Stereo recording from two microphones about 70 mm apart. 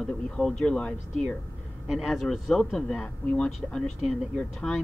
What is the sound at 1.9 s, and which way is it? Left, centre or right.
Speech, centre.